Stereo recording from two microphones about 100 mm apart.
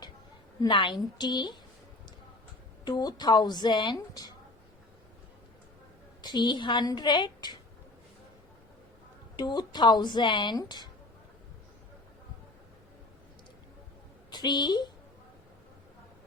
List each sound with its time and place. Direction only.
0.6 s speech: 55° left (ahead or behind)
2.8 s speech: 40° left (ahead or behind)
6.2 s speech: 50° left (ahead or behind)
9.3 s speech: 45° left (ahead or behind)
14.3 s a woman's voice: 45° left (ahead or behind)